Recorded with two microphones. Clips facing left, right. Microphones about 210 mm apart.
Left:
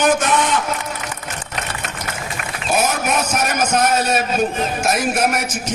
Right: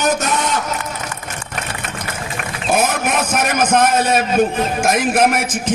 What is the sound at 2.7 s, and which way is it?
A man's voice, 55° right (ahead or behind).